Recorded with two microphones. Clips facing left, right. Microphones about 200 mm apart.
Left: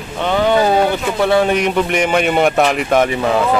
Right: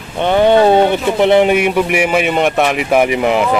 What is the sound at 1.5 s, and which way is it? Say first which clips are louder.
A man's voice: right 2 dB; 10° right (ahead or behind).